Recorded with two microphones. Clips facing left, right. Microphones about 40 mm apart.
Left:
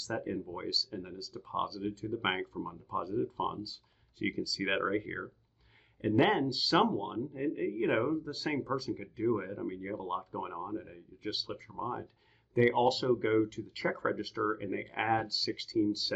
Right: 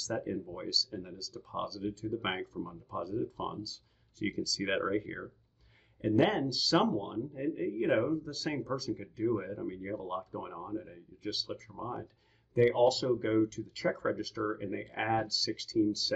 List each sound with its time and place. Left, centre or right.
0.0 s speech: centre